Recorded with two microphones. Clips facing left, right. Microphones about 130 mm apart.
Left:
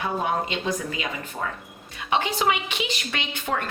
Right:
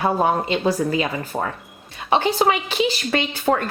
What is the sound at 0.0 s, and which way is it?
A woman's voice, 35° right (ahead or behind).